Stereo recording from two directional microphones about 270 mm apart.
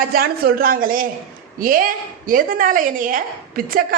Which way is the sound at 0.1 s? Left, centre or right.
Right.